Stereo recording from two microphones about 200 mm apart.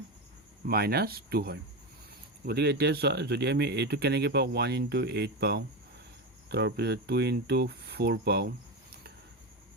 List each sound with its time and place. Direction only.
0.7 s speech: 50° right (ahead or behind)